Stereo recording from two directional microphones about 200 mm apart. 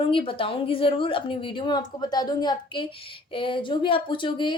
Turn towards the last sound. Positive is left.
turn(degrees=25)  # may be behind; listen again after turning